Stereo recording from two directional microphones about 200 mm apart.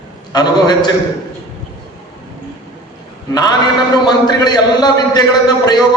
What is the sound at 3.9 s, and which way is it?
A man's voice, 20° left (ahead or behind).